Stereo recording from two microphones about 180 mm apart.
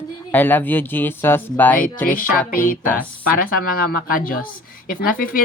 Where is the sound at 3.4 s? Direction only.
50° left (ahead or behind).